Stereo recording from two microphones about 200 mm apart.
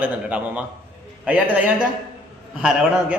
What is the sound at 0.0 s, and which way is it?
Speech, 5° right (ahead or behind).